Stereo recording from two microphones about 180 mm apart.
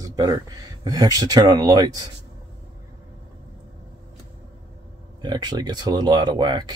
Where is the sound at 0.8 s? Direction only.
20° right (ahead or behind).